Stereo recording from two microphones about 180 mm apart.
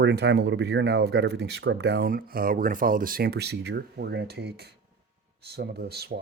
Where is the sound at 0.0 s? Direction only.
85° right.